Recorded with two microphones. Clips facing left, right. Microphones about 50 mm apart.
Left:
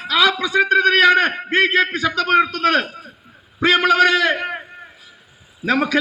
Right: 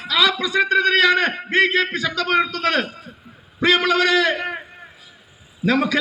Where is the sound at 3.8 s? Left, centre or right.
Left.